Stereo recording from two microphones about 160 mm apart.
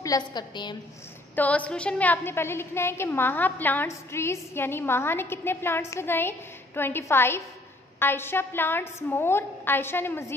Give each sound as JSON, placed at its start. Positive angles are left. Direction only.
{"t": 0.0, "sound": "a woman's voice", "side_deg": 25}
{"t": 1.3, "sound": "a woman's voice", "side_deg": 10}